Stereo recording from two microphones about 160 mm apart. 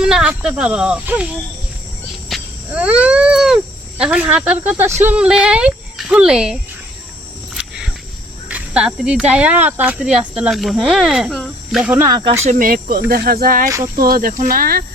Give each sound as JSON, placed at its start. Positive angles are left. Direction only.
{"t": 0.0, "sound": "speech", "side_deg": -5}
{"t": 2.3, "sound": "speech", "side_deg": -5}
{"t": 7.5, "sound": "wild animals", "side_deg": -5}
{"t": 8.4, "sound": "speech", "side_deg": -10}
{"t": 11.9, "sound": "speech", "side_deg": -20}
{"t": 12.5, "sound": "speech", "side_deg": -60}